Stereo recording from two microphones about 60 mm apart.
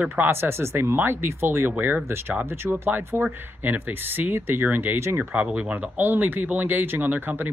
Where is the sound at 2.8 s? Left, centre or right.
Right.